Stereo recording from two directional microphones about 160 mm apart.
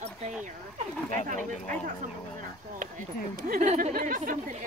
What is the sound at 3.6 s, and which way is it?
Speech, 50° right (ahead or behind).